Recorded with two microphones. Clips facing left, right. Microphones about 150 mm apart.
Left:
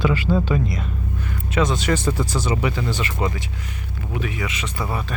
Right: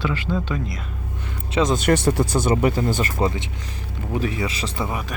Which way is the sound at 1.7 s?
55° right (ahead or behind).